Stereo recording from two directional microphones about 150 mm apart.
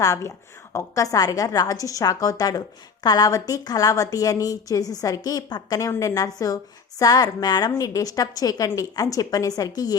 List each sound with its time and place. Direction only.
0.0 s a woman's voice: 20° left (ahead or behind)